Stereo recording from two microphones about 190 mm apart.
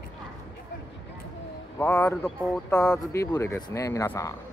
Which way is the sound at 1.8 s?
10° left (ahead or behind).